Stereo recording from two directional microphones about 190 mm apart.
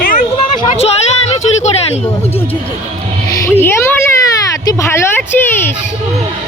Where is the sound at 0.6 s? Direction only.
30° left (ahead or behind).